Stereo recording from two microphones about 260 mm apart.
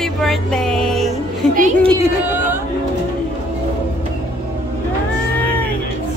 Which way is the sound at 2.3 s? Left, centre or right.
Centre.